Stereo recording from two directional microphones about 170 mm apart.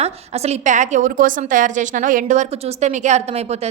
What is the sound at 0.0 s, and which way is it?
A woman's voice, 40° right (ahead or behind).